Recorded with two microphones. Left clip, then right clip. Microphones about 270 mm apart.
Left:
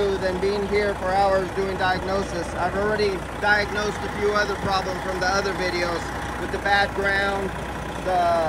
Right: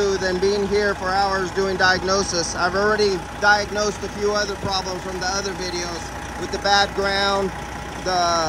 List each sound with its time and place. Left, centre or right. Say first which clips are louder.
0.0 s speech: right 3 dB; centre